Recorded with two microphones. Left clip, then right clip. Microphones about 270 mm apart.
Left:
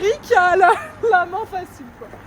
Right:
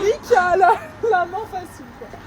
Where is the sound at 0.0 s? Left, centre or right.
Left.